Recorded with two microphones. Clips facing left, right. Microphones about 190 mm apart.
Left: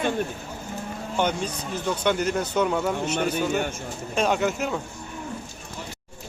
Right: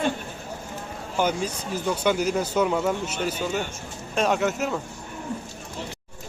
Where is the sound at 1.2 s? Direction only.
10° right (ahead or behind).